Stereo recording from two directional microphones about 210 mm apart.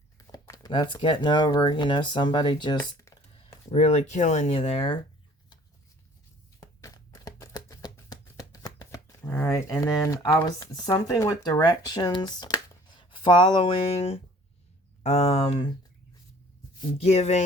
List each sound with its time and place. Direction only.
0.2 s speech: 15° left (ahead or behind)
2.8 s computer keyboard: 20° left (ahead or behind)
3.7 s speech: 30° left (ahead or behind)
6.6 s music: 15° left (ahead or behind)
13.0 s speech: 20° left (ahead or behind)
17.0 s speech: 30° left (ahead or behind)